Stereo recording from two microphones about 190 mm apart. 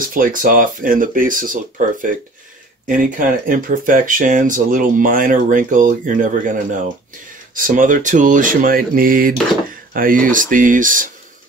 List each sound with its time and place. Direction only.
0.1 s speech: 45° right (ahead or behind)